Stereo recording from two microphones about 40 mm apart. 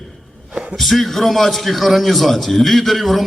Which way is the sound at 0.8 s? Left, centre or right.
Centre.